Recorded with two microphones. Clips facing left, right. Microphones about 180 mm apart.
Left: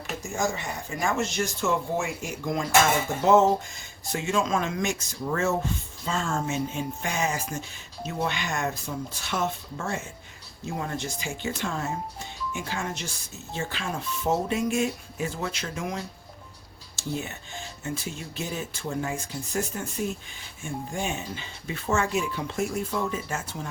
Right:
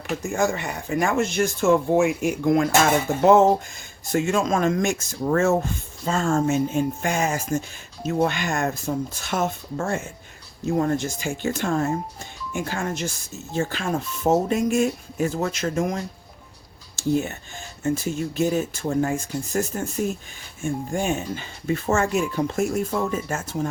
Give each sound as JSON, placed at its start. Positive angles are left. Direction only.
{"t": 0.3, "sound": "speech", "side_deg": -65}
{"t": 4.1, "sound": "speech", "side_deg": -50}